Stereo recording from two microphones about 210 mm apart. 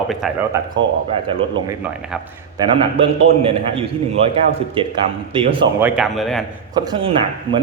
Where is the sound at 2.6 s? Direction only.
25° right (ahead or behind).